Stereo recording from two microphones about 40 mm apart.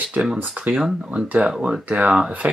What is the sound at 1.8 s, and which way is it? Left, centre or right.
Speech, right.